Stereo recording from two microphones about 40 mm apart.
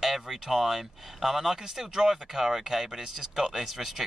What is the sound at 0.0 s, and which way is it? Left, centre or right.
Speech, centre.